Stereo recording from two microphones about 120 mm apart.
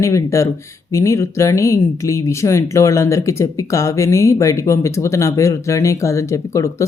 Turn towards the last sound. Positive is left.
turn(degrees=25)  # may be behind; listen again after turning